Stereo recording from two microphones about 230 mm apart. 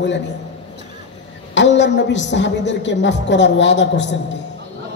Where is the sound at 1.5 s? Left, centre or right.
Left.